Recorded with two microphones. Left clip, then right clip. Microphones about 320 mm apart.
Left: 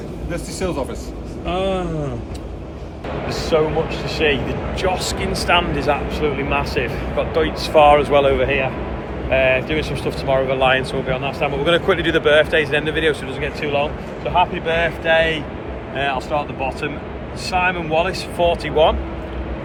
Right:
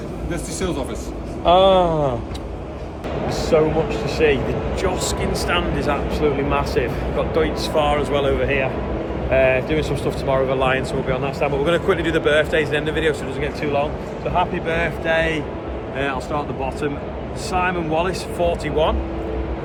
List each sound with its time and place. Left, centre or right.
1.5 s speech: centre
3.2 s a man's voice: centre
7.8 s a man's voice: centre